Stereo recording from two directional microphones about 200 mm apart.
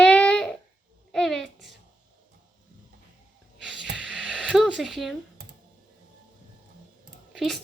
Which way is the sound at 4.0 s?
5° right (ahead or behind).